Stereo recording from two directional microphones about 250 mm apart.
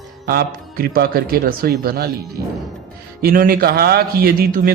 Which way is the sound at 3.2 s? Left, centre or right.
Right.